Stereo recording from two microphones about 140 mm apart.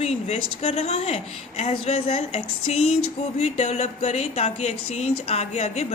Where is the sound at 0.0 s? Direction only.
50° left (ahead or behind).